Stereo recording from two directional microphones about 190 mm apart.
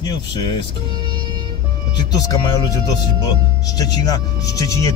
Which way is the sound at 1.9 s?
20° left (ahead or behind).